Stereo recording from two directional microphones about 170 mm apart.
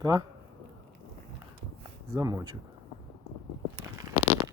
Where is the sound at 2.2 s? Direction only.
20° right (ahead or behind).